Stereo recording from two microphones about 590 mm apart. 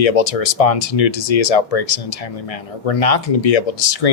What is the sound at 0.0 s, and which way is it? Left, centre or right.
Speech, left.